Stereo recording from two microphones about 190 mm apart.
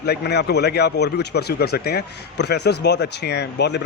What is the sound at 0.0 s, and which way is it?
Speech, 60° left (ahead or behind).